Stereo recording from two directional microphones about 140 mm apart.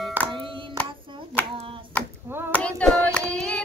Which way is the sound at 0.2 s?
10° right (ahead or behind).